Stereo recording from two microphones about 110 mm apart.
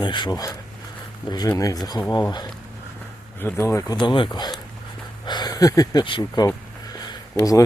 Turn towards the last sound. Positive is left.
turn(degrees=30)  # may be behind; listen again after turning